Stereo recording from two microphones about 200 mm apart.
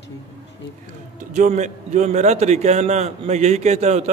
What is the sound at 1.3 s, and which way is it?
A man's voice, 35° right (ahead or behind).